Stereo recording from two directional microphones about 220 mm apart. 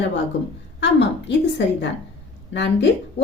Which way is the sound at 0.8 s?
50° left (ahead or behind).